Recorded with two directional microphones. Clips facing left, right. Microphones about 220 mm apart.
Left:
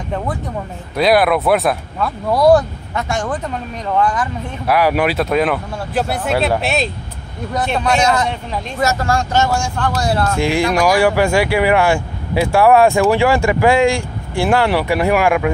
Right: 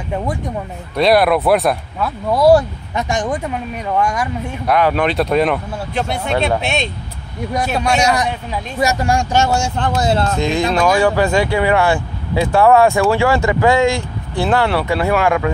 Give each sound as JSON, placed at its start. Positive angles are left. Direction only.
{"t": 0.9, "sound": "speech", "side_deg": 0}
{"t": 3.0, "sound": "speech", "side_deg": -15}
{"t": 4.6, "sound": "speech", "side_deg": 10}
{"t": 7.5, "sound": "speech", "side_deg": -10}
{"t": 10.3, "sound": "speech", "side_deg": 10}